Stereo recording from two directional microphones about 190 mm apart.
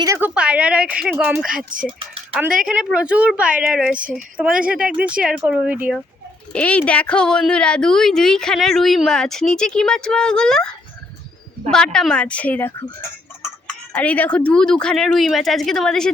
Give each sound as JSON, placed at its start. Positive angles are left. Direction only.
{"t": 0.0, "sound": "a woman's voice", "side_deg": -15}
{"t": 0.3, "sound": "a woman's voice", "side_deg": -5}
{"t": 6.5, "sound": "a woman's voice", "side_deg": 5}
{"t": 11.7, "sound": "a woman's voice", "side_deg": 5}
{"t": 13.9, "sound": "a woman's voice", "side_deg": 10}